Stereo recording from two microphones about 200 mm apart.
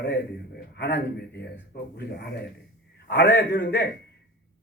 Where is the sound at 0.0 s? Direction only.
55° left (ahead or behind).